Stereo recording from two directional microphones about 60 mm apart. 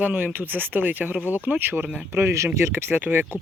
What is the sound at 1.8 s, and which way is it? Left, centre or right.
Speech, centre.